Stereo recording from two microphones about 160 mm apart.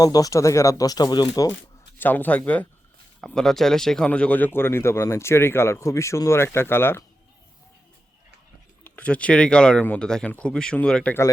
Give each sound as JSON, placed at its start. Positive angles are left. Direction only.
{"t": 0.0, "sound": "speech", "side_deg": 25}
{"t": 2.0, "sound": "speech", "side_deg": 10}
{"t": 8.8, "sound": "speech", "side_deg": 10}